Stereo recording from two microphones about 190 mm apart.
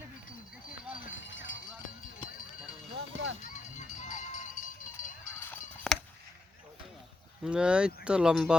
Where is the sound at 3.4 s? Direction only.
40° left (ahead or behind).